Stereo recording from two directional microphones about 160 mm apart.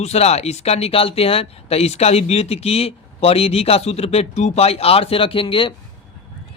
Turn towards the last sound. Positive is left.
turn(degrees=35)  # may be behind; listen again after turning